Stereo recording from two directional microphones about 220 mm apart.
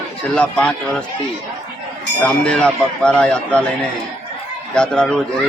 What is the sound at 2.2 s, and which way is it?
Speech, 5° left (ahead or behind).